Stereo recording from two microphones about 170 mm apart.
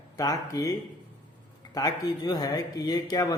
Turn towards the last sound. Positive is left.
turn(degrees=20)  # may be behind; listen again after turning